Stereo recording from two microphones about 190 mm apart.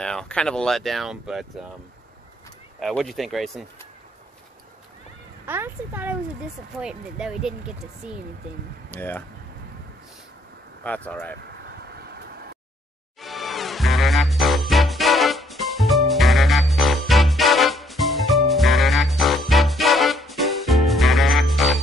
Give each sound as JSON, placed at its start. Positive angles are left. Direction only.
{"t": 0.0, "sound": "speech", "side_deg": 5}
{"t": 2.8, "sound": "speech", "side_deg": 0}
{"t": 5.5, "sound": "speech", "side_deg": -10}
{"t": 8.9, "sound": "speech", "side_deg": 10}
{"t": 10.8, "sound": "speech", "side_deg": 10}
{"t": 12.0, "sound": "vehicle", "side_deg": -55}
{"t": 13.2, "sound": "music", "side_deg": 0}